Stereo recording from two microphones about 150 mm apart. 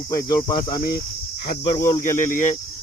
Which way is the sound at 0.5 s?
70° left (ahead or behind).